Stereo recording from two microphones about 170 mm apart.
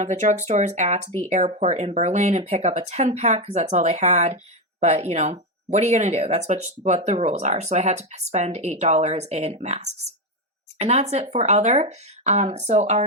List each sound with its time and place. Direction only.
0.0 s speech: 45° right (ahead or behind)